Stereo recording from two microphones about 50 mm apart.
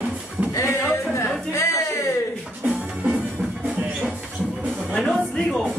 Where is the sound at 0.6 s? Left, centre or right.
Left.